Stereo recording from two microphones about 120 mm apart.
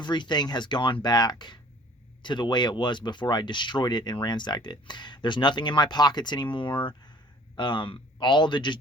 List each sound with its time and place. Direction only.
0.0 s speech: 40° left (ahead or behind)